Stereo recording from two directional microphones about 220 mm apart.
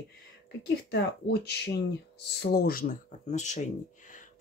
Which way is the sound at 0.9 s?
50° left (ahead or behind).